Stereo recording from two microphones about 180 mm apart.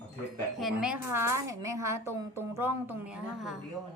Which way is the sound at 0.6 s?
Centre (ahead or behind).